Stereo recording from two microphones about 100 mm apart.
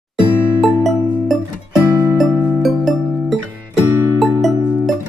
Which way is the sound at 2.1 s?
Centre (ahead or behind).